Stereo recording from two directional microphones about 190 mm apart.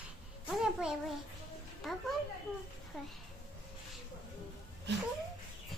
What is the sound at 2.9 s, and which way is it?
Speech, centre (ahead or behind).